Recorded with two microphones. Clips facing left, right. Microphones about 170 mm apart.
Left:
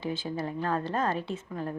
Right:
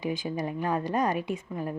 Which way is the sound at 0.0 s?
15° right (ahead or behind).